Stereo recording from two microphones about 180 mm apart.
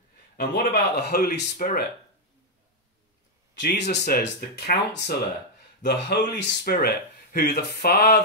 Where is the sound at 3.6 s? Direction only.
65° left (ahead or behind).